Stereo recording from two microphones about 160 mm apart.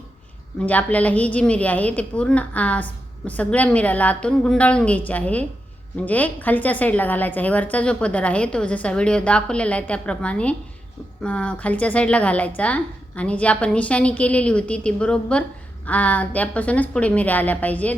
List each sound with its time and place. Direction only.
0.6 s a woman's voice: 10° left (ahead or behind)